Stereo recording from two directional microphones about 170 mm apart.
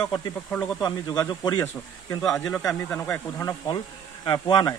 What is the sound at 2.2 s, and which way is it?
Speech, 5° left (ahead or behind).